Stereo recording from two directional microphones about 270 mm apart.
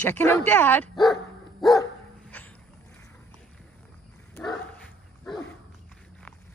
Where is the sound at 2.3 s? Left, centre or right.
Centre.